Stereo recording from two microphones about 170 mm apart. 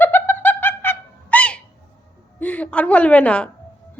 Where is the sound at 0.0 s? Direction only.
10° left (ahead or behind).